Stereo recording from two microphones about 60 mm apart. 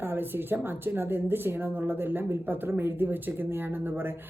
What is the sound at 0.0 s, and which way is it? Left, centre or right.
Speech, right.